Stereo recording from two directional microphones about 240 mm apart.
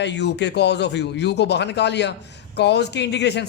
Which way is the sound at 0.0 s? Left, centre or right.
Left.